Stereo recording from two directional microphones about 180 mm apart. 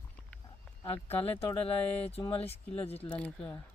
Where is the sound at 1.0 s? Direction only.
35° left (ahead or behind).